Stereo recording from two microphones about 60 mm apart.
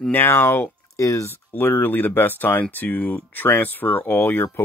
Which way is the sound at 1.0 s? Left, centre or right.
Left.